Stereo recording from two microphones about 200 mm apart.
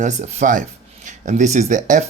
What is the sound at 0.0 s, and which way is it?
Speech, 35° right (ahead or behind).